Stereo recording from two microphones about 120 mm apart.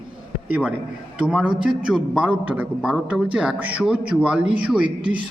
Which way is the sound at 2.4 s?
15° right (ahead or behind).